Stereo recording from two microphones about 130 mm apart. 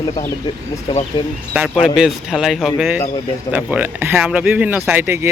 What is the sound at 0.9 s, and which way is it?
Speech, 35° left (ahead or behind).